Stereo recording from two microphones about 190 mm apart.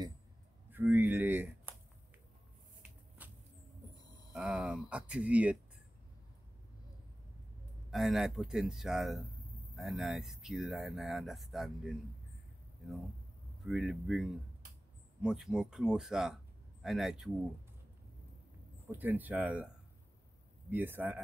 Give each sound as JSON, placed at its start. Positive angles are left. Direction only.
{"t": 0.7, "sound": "speech", "side_deg": -10}
{"t": 3.2, "sound": "a sound", "side_deg": -10}
{"t": 3.9, "sound": "a sound", "side_deg": 20}
{"t": 4.3, "sound": "speech", "side_deg": -5}
{"t": 7.9, "sound": "speech", "side_deg": 0}
{"t": 13.7, "sound": "speech", "side_deg": 0}
{"t": 18.9, "sound": "speech", "side_deg": -10}
{"t": 20.7, "sound": "speech", "side_deg": -10}